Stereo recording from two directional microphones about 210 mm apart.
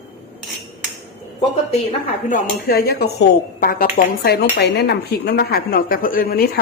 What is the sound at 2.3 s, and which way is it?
Speech, 45° left (ahead or behind).